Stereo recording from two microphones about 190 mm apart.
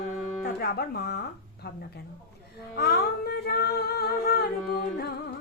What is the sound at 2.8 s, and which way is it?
Humming, 55° left (ahead or behind).